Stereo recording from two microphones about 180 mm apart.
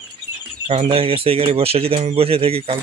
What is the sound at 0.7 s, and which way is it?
Speech, 30° right (ahead or behind).